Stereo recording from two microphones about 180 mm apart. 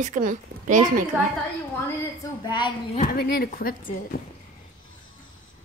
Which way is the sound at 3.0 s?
60° left (ahead or behind).